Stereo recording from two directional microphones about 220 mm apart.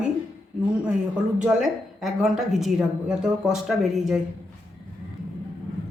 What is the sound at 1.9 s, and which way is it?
Speech, centre (ahead or behind).